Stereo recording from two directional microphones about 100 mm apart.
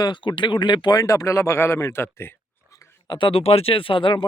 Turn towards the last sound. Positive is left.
turn(degrees=55)  # may be behind; listen again after turning